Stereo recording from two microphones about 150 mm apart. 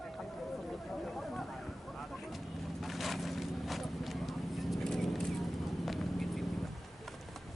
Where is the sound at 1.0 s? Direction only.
5° left (ahead or behind).